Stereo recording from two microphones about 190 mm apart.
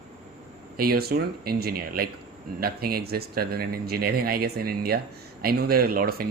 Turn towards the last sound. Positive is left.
turn(degrees=-50)  # may be behind; listen again after turning